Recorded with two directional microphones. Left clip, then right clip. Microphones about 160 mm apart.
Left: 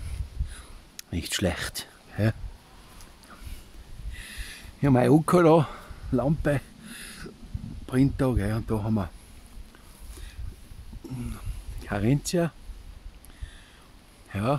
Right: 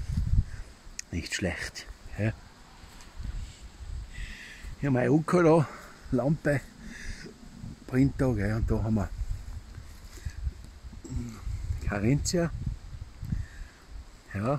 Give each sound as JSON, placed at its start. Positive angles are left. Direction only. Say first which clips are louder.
{"t": 0.9, "sound": "speech", "louder": "left 3 dB", "side_deg": 30}
{"t": 4.8, "sound": "speech", "louder": "left 5 dB", "side_deg": 30}
{"t": 5.3, "sound": "a sound", "louder": "left 1 dB", "side_deg": 15}
{"t": 7.9, "sound": "speech", "louder": "left 2 dB", "side_deg": 5}
{"t": 11.8, "sound": "speech", "louder": "left 2 dB", "side_deg": 10}
{"t": 14.3, "sound": "speech", "louder": "left 3 dB", "side_deg": 15}